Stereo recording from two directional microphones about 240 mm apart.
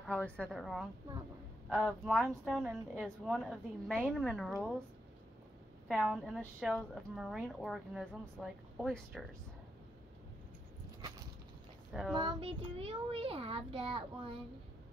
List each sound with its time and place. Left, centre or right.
0.0 s a woman's voice: centre
5.9 s a woman's voice: centre
12.1 s a child's voice: centre